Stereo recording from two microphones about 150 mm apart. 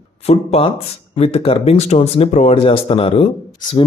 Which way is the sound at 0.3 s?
40° left (ahead or behind).